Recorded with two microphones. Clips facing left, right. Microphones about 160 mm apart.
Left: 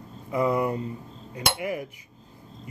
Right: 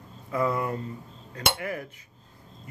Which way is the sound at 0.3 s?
15° left (ahead or behind).